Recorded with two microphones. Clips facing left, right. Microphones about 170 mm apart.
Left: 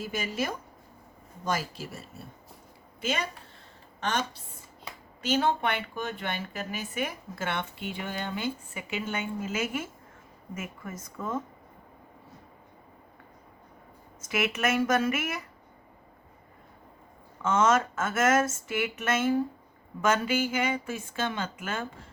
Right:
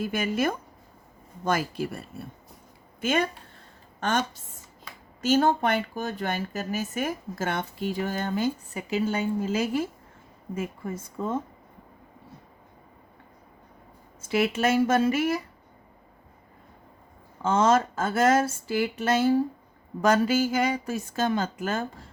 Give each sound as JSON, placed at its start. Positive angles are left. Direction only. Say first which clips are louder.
{"t": 0.0, "sound": "a woman's voice", "louder": "right 6 dB", "side_deg": -55}
{"t": 14.2, "sound": "speech", "louder": "right 5 dB", "side_deg": -30}
{"t": 17.4, "sound": "speech", "louder": "right 2 dB", "side_deg": -30}